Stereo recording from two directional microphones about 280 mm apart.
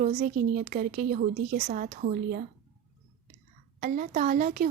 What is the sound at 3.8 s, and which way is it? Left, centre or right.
Speech, right.